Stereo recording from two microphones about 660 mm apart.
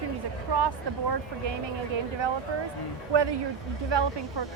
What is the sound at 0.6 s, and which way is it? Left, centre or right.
Speech, right.